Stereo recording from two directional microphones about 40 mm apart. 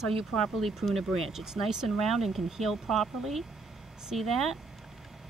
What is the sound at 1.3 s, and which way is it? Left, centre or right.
Speech, centre.